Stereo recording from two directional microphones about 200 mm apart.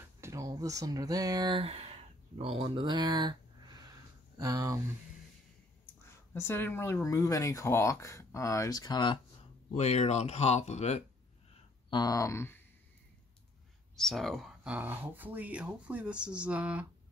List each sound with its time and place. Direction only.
0.2 s speech: 15° right (ahead or behind)
6.0 s speech: 15° left (ahead or behind)
9.8 s speech: 35° left (ahead or behind)
11.9 s speech: 20° left (ahead or behind)
13.9 s speech: centre (ahead or behind)